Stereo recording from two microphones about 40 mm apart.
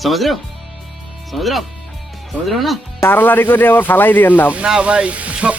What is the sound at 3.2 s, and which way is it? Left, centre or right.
Speech, left.